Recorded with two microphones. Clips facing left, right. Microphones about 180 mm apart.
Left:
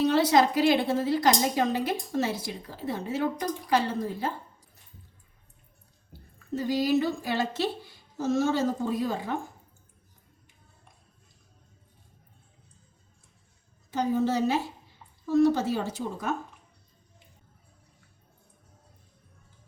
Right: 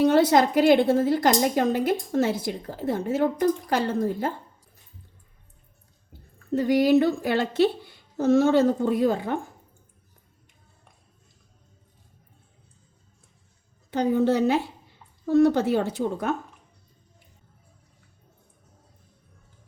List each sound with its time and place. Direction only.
0.0 s speech: 50° right (ahead or behind)
6.5 s a woman's voice: 60° right (ahead or behind)
13.9 s a woman's voice: 60° right (ahead or behind)